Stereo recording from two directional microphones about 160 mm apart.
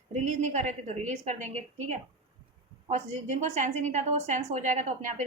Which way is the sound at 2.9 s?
45° right (ahead or behind).